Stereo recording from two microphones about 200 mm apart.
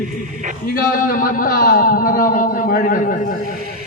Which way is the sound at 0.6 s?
45° left (ahead or behind).